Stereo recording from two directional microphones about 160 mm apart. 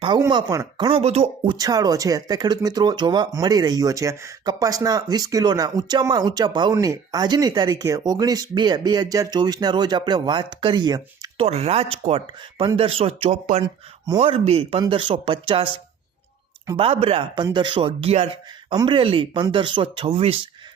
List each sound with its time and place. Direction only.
0.2 s speech: 25° right (ahead or behind); by 1.5 s 40° right (ahead or behind)
1.5 s speech: 25° right (ahead or behind)
11.3 s speech: 40° right (ahead or behind)
16.7 s speech: 35° right (ahead or behind)